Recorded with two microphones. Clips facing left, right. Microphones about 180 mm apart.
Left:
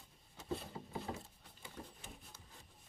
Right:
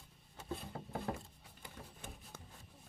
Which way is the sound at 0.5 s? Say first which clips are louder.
Even; 55° right (ahead or behind).